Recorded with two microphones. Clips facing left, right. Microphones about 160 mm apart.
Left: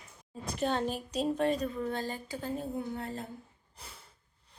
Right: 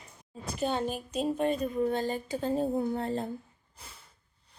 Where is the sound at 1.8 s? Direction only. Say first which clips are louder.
Right 6 dB; 20° right (ahead or behind).